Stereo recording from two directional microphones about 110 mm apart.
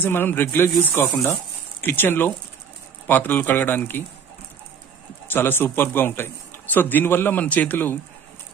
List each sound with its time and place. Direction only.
0.0 s a man's voice: 20° left (ahead or behind)
5.3 s a man's voice: 20° left (ahead or behind)